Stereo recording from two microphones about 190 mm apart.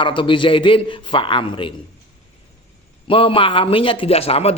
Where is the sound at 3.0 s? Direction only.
30° left (ahead or behind).